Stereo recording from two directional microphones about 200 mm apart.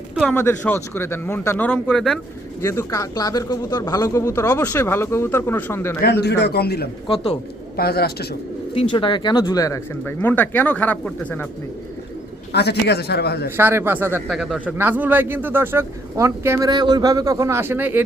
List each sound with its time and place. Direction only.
0.1 s a sound: centre (ahead or behind)
0.3 s speech: 10° left (ahead or behind)
2.6 s speech: 15° left (ahead or behind)
6.0 s a man's voice: 55° left (ahead or behind)
8.7 s speech: 25° left (ahead or behind); by 11.4 s 5° left (ahead or behind)
12.5 s speech: 55° left (ahead or behind)
13.6 s a man's voice: 10° right (ahead or behind)